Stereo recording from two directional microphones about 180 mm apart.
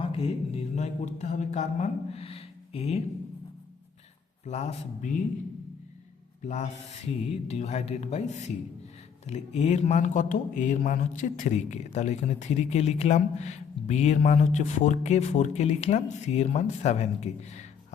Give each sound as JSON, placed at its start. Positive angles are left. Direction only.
{"t": 0.0, "sound": "speech", "side_deg": 30}
{"t": 4.4, "sound": "a man's voice", "side_deg": 40}
{"t": 6.4, "sound": "a man's voice", "side_deg": 40}